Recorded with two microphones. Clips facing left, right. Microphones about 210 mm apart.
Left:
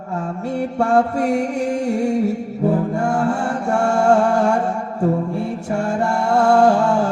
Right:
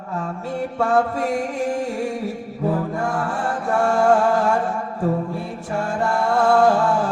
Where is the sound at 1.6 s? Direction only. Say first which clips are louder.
Left 4 dB; 25° left (ahead or behind).